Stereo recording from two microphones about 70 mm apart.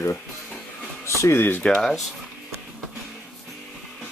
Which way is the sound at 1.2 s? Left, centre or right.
Left.